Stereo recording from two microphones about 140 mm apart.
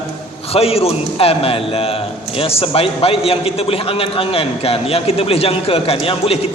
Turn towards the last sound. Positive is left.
turn(degrees=40)  # may be behind; listen again after turning